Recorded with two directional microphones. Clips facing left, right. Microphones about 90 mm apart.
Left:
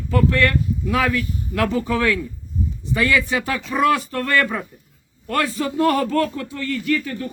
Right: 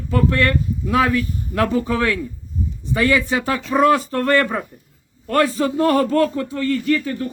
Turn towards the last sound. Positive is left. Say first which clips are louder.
# right 3 dB
turn(degrees=-35)  # may be behind; listen again after turning